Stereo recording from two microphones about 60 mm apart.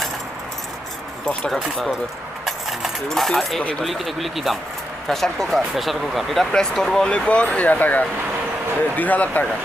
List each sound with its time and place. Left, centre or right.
1.5 s speech: centre
3.1 s speech: centre
6.5 s speech: centre; by 9.5 s left